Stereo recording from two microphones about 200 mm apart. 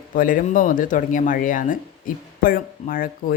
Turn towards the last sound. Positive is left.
turn(degrees=45)  # may be behind; listen again after turning